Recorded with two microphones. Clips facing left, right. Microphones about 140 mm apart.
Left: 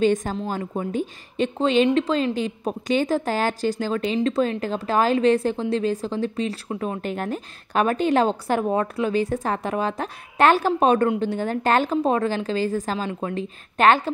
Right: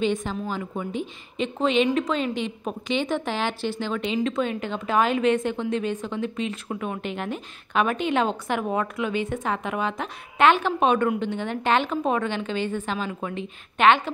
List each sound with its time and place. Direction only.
0.0 s a woman's voice: 45° left (ahead or behind)